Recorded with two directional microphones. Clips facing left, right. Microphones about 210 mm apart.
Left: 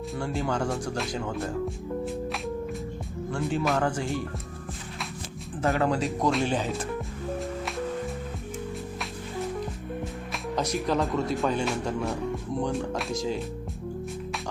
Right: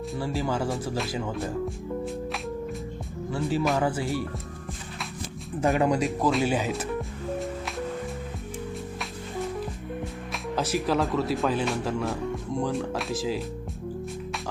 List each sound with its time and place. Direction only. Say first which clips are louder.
0.2 s speech: even; 5° right (ahead or behind)
5.6 s speech: right 2 dB; 15° right (ahead or behind)
6.1 s speech: right 1 dB; centre (ahead or behind)
10.0 s speech: even; centre (ahead or behind)